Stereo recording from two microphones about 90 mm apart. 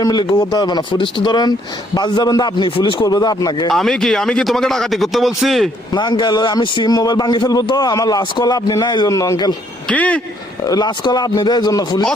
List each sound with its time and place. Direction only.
0.0 s a man's voice: 50° left (ahead or behind)
2.6 s speech: 75° left (ahead or behind)
3.0 s a man's voice: 45° left (ahead or behind)
3.7 s a man's voice: 5° left (ahead or behind)
5.9 s a man's voice: 55° left (ahead or behind)
9.9 s speech: 15° left (ahead or behind)
10.7 s a man's voice: 55° left (ahead or behind)